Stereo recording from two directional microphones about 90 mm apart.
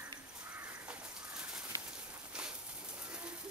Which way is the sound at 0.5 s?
15° right (ahead or behind).